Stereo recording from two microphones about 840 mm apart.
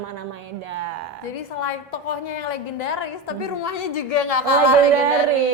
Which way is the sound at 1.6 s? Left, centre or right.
Left.